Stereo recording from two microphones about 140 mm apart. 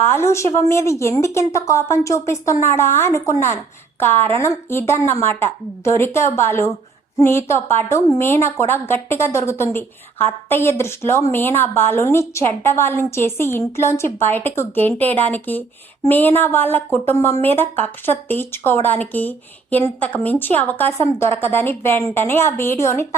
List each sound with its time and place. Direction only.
0.0 s a woman's voice: 15° left (ahead or behind)